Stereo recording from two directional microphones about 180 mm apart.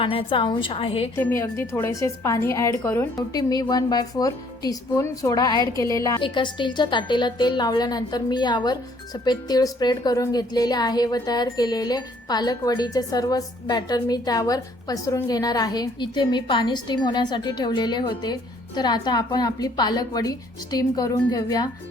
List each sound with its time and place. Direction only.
0.0 s a woman's voice: 30° left (ahead or behind)
1.1 s a woman's voice: 15° left (ahead or behind)